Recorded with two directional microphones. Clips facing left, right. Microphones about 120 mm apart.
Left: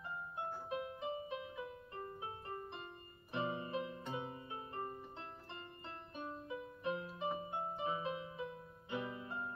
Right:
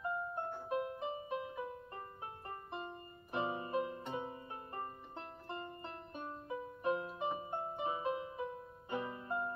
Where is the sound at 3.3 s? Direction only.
35° right (ahead or behind).